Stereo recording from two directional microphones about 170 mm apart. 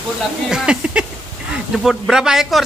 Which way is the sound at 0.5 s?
5° right (ahead or behind).